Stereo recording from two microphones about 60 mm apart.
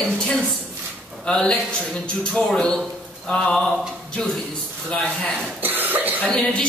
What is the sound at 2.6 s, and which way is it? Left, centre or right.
A man's voice, centre.